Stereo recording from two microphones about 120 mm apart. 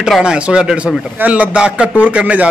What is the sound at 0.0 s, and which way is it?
A man's voice, 5° right (ahead or behind).